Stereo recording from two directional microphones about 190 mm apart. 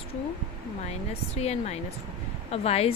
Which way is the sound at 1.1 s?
35° left (ahead or behind).